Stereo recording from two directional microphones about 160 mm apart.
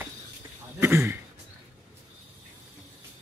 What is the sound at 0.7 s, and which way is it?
Throat clearing, 15° right (ahead or behind).